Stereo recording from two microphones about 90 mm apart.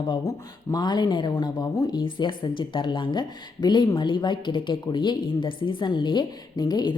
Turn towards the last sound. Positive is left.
turn(degrees=50)  # may be behind; listen again after turning